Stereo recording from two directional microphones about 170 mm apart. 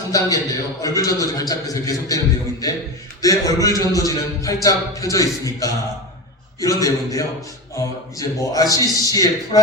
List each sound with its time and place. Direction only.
0.1 s a man's voice: 20° left (ahead or behind)